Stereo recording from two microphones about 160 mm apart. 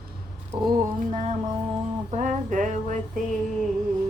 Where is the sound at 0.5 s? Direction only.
25° right (ahead or behind).